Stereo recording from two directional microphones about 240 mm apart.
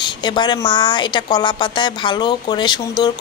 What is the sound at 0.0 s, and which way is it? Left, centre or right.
A woman's voice, centre.